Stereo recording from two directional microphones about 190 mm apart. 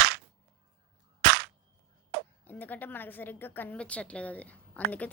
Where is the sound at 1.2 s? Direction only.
60° right (ahead or behind).